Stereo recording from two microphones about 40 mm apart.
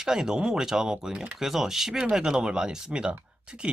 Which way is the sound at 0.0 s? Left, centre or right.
Centre.